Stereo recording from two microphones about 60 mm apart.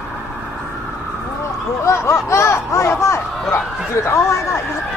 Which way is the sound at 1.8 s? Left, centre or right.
Left.